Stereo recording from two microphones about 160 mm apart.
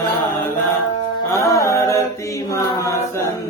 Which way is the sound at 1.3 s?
20° left (ahead or behind).